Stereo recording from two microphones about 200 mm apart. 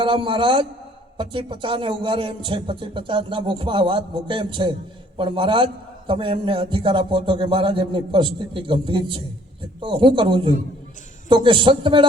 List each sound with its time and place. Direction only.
0.0 s a man's voice: 25° right (ahead or behind)